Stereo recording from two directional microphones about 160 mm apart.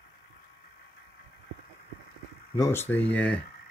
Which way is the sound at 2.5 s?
15° left (ahead or behind).